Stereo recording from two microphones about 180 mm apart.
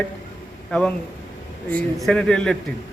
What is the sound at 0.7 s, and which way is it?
A man's voice, 5° left (ahead or behind).